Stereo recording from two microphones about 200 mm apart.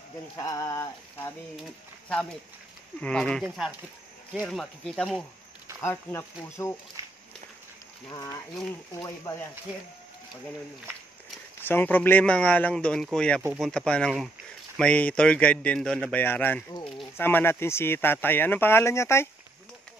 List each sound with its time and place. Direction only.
0.4 s speech: 15° left (ahead or behind)
5.8 s speech: 15° left (ahead or behind)
8.1 s speech: 15° left (ahead or behind)
11.6 s speech: 10° left (ahead or behind)